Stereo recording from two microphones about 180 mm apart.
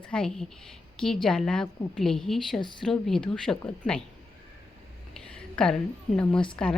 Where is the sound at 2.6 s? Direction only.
25° left (ahead or behind).